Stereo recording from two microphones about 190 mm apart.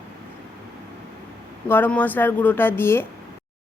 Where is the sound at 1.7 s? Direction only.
10° left (ahead or behind).